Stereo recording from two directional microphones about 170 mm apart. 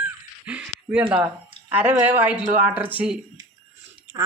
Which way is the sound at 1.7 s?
10° right (ahead or behind).